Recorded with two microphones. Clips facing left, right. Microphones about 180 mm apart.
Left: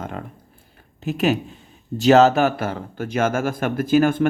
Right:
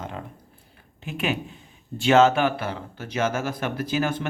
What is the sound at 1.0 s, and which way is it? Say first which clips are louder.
Speech: left 7 dB; 40° left (ahead or behind).